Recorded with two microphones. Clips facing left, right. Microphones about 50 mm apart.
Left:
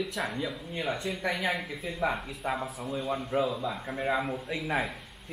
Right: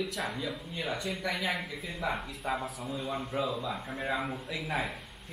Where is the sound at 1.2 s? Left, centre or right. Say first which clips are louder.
Left 2 dB; centre.